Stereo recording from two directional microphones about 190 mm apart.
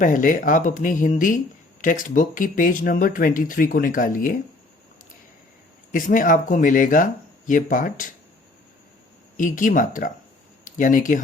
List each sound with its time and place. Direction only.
0.0 s speech: 45° left (ahead or behind)
5.9 s speech: 45° left (ahead or behind)
9.4 s speech: 45° left (ahead or behind)